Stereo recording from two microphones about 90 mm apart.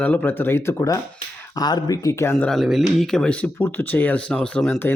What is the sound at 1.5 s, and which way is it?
Speech, 50° left (ahead or behind).